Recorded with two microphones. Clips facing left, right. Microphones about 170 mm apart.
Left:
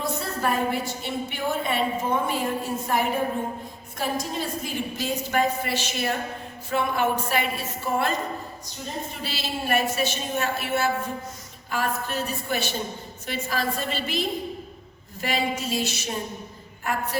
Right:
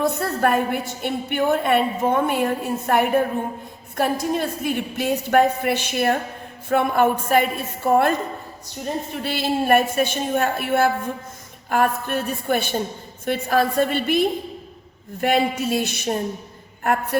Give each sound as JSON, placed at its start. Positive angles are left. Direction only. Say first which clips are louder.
{"t": 0.0, "sound": "a woman's voice", "louder": "right 7 dB", "side_deg": -60}
{"t": 9.2, "sound": "a woman's voice", "louder": "right 10 dB", "side_deg": -55}